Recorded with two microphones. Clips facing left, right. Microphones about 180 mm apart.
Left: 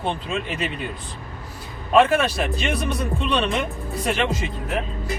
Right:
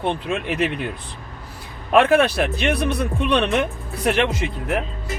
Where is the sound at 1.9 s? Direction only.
60° right (ahead or behind).